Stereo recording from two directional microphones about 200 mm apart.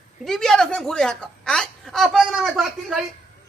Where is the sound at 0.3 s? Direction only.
Centre (ahead or behind).